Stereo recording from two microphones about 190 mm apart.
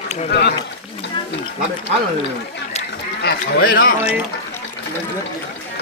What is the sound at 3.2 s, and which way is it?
Speech, 55° left (ahead or behind).